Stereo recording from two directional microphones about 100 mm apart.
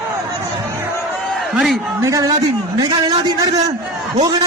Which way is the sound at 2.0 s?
35° right (ahead or behind).